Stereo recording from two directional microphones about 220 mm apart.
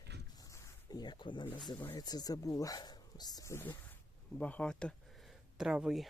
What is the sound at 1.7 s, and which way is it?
Speech, 15° left (ahead or behind).